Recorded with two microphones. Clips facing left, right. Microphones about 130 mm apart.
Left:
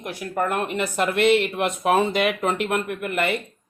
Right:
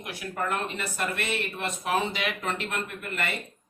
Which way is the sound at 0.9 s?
65° left (ahead or behind).